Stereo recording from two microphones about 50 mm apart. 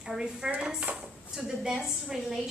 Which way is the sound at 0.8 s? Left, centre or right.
Right.